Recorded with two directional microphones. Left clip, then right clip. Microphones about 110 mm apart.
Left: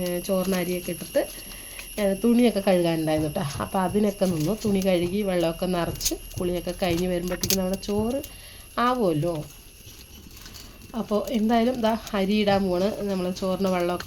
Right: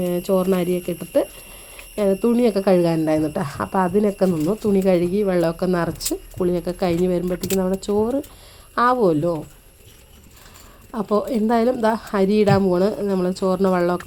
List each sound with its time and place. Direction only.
0.0 s a woman's voice: 45° right (ahead or behind); by 7.8 s 25° right (ahead or behind)
7.8 s speech: 35° right (ahead or behind)
10.9 s a woman's voice: 50° right (ahead or behind)